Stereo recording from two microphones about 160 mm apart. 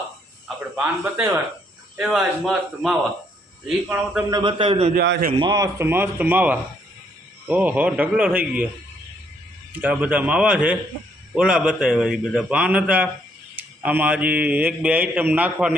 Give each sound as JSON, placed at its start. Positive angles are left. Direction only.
{"t": 1.0, "sound": "speech", "side_deg": -15}
{"t": 2.0, "sound": "a man's voice", "side_deg": 0}
{"t": 4.4, "sound": "a man's voice", "side_deg": -30}
{"t": 4.9, "sound": "a man's voice", "side_deg": -85}
{"t": 5.4, "sound": "speech", "side_deg": -25}
{"t": 9.7, "sound": "a man's voice", "side_deg": -10}